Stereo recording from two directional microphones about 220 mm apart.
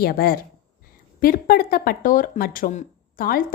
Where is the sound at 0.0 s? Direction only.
45° left (ahead or behind).